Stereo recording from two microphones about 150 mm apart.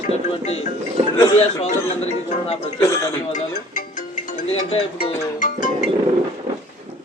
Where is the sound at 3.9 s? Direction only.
60° left (ahead or behind).